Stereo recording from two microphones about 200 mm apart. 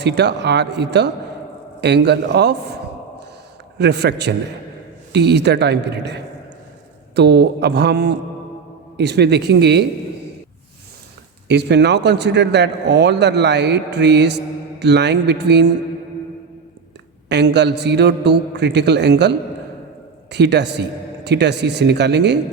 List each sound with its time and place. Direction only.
0.0 s a man's voice: 60° right (ahead or behind)
3.8 s a man's voice: 55° right (ahead or behind)
11.4 s a man's voice: 60° right (ahead or behind)
17.2 s a man's voice: 60° right (ahead or behind)
20.3 s a man's voice: 60° right (ahead or behind)